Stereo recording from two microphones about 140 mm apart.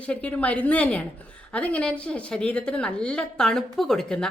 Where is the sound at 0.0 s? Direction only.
10° left (ahead or behind).